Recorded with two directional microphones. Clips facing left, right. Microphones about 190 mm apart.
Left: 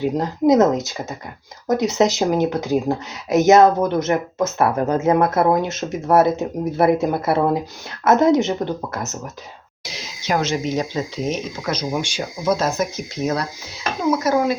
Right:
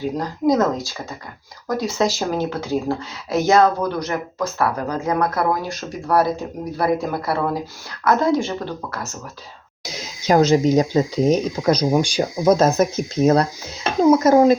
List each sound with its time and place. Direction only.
0.2 s speech: 20° left (ahead or behind)
10.2 s speech: 40° right (ahead or behind)